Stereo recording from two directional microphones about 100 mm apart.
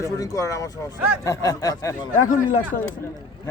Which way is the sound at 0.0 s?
35° left (ahead or behind).